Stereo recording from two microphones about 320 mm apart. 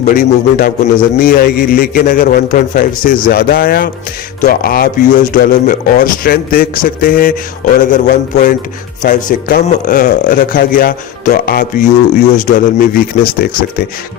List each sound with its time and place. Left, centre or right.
0.0 s a man's voice: left